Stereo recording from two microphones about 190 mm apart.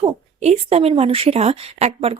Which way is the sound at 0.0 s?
35° right (ahead or behind).